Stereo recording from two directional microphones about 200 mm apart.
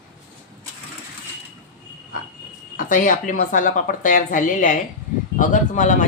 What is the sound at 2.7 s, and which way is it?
Speech, 40° left (ahead or behind).